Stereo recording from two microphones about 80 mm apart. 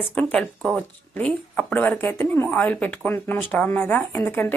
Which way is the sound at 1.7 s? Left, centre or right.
Left.